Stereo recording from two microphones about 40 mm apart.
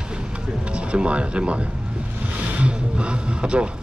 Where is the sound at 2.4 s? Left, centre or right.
Right.